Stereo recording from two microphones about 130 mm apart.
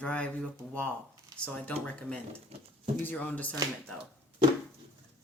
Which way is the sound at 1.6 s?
10° left (ahead or behind).